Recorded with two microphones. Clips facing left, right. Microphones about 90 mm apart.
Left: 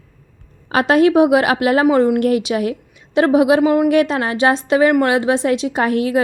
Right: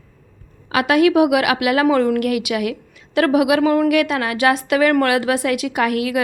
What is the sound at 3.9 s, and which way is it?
A woman's voice, 30° left (ahead or behind).